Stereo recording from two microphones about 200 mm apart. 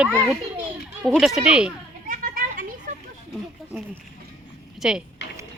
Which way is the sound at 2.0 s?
45° right (ahead or behind).